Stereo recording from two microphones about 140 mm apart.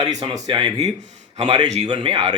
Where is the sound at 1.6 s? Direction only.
55° right (ahead or behind).